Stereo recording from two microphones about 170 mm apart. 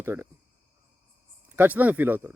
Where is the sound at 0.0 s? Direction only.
15° right (ahead or behind).